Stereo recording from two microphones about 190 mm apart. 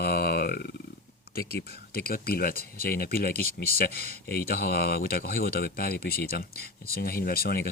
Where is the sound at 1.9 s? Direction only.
50° left (ahead or behind).